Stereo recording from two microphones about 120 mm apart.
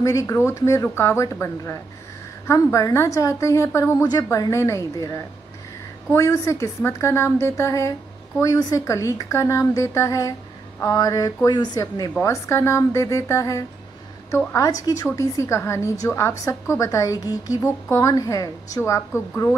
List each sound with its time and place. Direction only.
0.0 s a woman's voice: 25° left (ahead or behind)
12.2 s a woman's voice: 20° left (ahead or behind)